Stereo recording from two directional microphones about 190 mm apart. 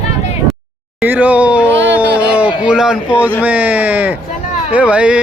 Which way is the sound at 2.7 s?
5° right (ahead or behind).